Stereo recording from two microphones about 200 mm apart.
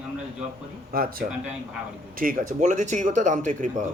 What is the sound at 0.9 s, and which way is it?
Speech, 45° right (ahead or behind).